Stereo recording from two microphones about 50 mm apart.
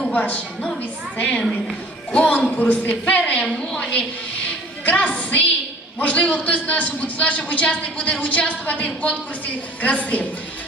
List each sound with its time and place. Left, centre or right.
0.1 s a woman's voice: left